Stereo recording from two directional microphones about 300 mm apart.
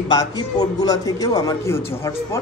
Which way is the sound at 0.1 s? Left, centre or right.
Centre.